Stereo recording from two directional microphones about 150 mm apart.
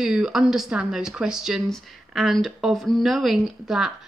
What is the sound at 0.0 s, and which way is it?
Speech, 5° right (ahead or behind).